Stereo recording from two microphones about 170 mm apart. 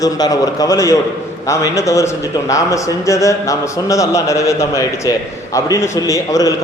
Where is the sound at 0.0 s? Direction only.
20° left (ahead or behind).